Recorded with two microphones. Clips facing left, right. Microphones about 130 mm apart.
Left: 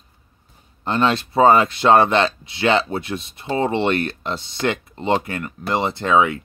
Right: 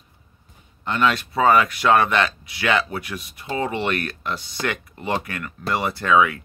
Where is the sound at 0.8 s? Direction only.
30° left (ahead or behind).